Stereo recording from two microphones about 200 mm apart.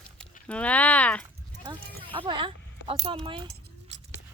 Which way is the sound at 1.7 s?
20° right (ahead or behind).